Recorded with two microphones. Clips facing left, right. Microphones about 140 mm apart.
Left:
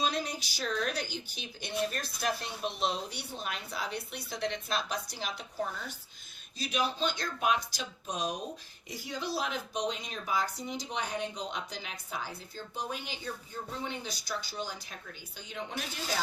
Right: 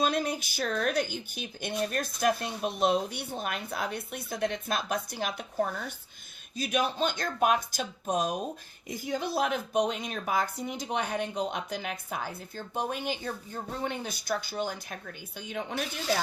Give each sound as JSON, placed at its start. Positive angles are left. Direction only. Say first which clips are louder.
{"t": 0.0, "sound": "speech", "louder": "right 5 dB", "side_deg": -55}